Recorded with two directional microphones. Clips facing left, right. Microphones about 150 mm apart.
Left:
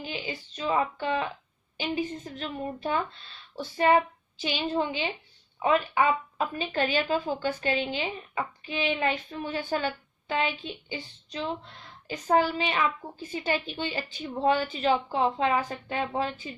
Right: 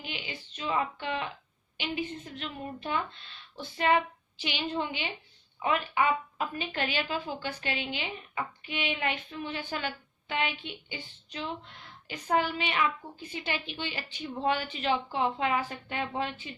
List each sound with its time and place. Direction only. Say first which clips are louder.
0.0 s a woman's voice: left 5 dB; 35° left (ahead or behind)